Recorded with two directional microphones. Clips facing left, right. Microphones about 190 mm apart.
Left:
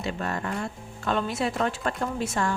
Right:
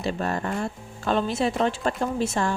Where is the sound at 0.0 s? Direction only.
30° right (ahead or behind).